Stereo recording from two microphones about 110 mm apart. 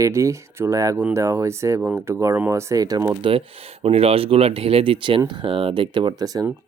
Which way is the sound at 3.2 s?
60° right (ahead or behind).